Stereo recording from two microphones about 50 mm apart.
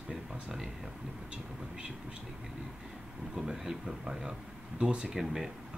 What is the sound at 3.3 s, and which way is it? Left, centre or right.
Speech, centre.